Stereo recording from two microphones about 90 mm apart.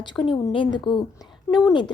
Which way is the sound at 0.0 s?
60° left (ahead or behind).